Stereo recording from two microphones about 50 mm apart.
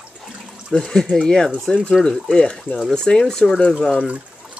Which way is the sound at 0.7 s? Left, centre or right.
Centre.